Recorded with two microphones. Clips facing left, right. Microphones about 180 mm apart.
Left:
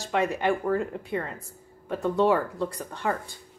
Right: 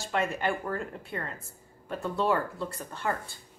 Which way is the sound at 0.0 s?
15° left (ahead or behind).